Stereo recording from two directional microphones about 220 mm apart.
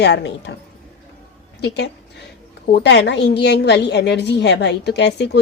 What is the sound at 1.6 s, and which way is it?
A woman's voice, 50° left (ahead or behind).